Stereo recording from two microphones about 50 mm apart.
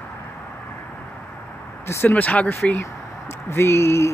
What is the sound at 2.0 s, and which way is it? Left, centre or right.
Speech, left.